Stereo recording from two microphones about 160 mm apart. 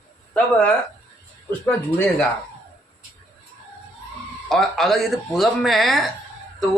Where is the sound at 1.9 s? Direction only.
10° left (ahead or behind).